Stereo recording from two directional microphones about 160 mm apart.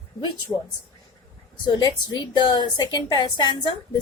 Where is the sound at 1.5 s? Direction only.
30° left (ahead or behind).